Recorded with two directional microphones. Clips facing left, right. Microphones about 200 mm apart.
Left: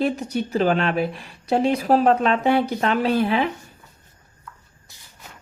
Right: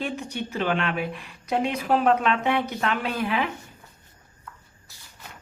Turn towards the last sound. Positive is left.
turn(degrees=30)  # may be behind; listen again after turning